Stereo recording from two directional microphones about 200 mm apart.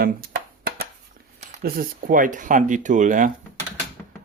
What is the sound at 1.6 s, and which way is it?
Speech, 45° right (ahead or behind).